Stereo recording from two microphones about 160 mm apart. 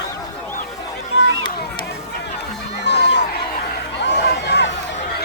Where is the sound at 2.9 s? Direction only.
90° left.